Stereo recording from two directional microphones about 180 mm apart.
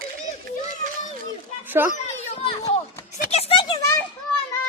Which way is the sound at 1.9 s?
40° left (ahead or behind).